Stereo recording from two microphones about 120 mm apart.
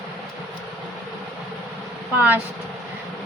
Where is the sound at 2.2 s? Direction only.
15° right (ahead or behind).